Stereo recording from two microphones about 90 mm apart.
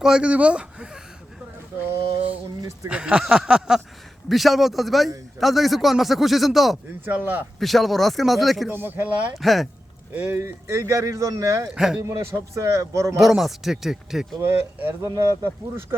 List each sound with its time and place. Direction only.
0.0 s speech: 10° right (ahead or behind)
2.6 s speech: 35° right (ahead or behind)
2.9 s a sound: 10° right (ahead or behind)
4.3 s a man's voice: centre (ahead or behind)
7.0 s speech: 20° right (ahead or behind)
7.6 s a man's voice: centre (ahead or behind)
8.7 s speech: 20° right (ahead or behind)
9.3 s a man's voice: centre (ahead or behind)
10.3 s speech: 30° right (ahead or behind)
11.7 s a sound: 5° right (ahead or behind)
12.0 s speech: 30° right (ahead or behind)
13.1 s a man's voice: centre (ahead or behind)
14.4 s speech: 25° right (ahead or behind)
15.0 s speech: 40° right (ahead or behind)